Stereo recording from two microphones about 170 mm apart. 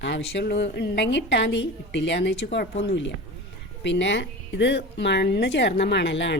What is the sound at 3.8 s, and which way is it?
A woman's voice, 90° left.